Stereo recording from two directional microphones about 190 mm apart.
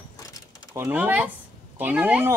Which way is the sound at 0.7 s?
10° right (ahead or behind).